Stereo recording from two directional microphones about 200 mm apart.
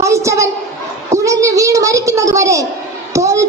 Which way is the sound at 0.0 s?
15° right (ahead or behind).